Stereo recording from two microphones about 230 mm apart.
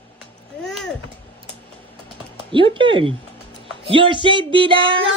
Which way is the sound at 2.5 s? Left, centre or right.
Right.